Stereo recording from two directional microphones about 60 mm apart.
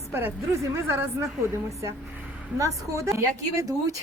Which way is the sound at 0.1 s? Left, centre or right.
Right.